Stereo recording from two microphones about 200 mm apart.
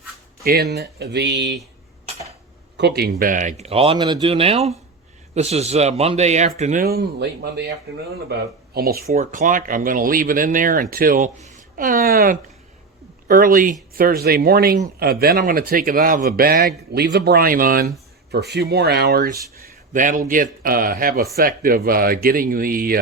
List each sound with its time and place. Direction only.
0.4 s speech: 50° right (ahead or behind)
2.7 s speech: 55° right (ahead or behind); by 6.8 s 35° right (ahead or behind)
6.8 s speech: 50° right (ahead or behind)
8.7 s speech: 50° right (ahead or behind)